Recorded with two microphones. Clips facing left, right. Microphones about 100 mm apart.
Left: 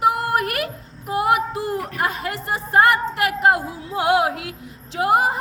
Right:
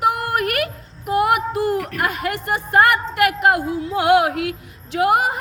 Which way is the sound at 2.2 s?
70° right (ahead or behind).